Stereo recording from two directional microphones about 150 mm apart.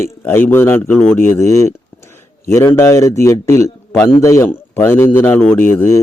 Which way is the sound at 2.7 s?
20° left (ahead or behind).